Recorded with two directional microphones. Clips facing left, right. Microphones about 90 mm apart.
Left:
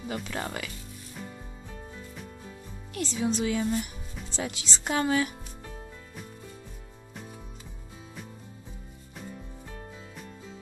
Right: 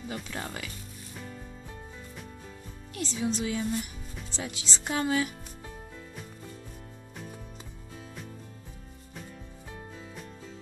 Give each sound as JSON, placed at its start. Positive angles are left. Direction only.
{"t": 0.3, "sound": "speech", "side_deg": 90}
{"t": 2.9, "sound": "speech", "side_deg": 60}
{"t": 4.4, "sound": "speech", "side_deg": 85}